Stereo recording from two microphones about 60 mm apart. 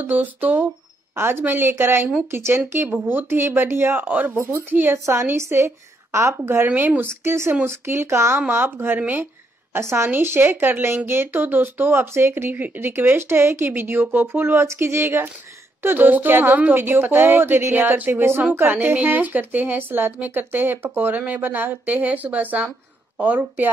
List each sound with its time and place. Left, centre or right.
0.0 s speech: right
4.5 s speech: right
6.7 s a woman's voice: right
7.2 s speech: right
8.5 s speech: right
9.8 s speech: right
10.1 s speech: right
12.1 s a woman's voice: right